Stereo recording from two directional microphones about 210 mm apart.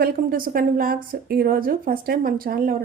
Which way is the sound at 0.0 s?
40° right (ahead or behind).